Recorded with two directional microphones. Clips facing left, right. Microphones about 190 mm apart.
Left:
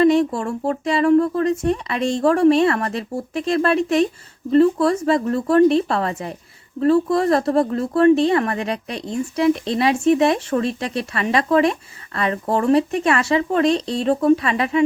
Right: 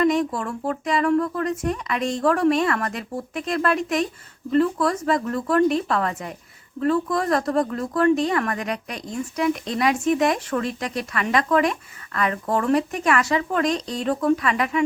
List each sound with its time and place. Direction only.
0.0 s speech: 30° left (ahead or behind)